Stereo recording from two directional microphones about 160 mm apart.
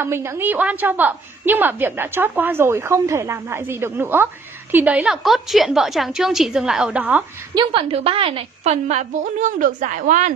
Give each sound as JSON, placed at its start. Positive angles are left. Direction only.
{"t": 0.0, "sound": "a woman's voice", "side_deg": -15}
{"t": 7.5, "sound": "a woman's voice", "side_deg": -35}